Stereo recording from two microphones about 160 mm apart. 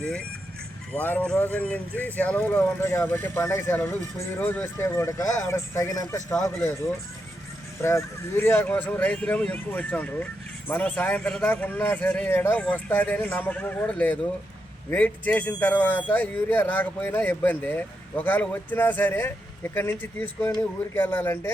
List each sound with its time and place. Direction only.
0.0 s speech: 5° left (ahead or behind)